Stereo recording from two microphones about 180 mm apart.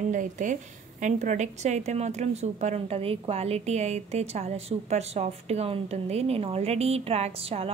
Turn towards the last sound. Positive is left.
turn(degrees=-35)  # may be behind; listen again after turning